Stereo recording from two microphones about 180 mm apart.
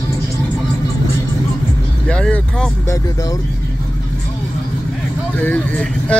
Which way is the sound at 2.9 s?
20° left (ahead or behind).